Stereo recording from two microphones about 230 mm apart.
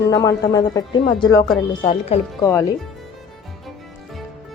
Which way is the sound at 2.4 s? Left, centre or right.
Centre.